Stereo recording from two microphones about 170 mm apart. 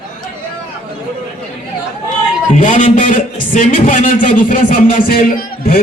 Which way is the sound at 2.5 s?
50° left (ahead or behind).